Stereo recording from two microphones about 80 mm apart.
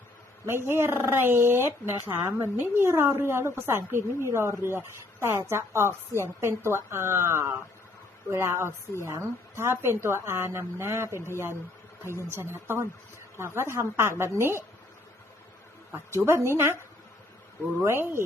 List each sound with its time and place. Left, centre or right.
0.4 s speech: right
12.3 s speech: right
16.1 s speech: right
17.8 s speech: right